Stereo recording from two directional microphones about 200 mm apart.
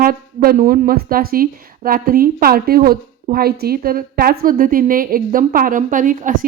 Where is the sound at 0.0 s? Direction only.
45° right (ahead or behind).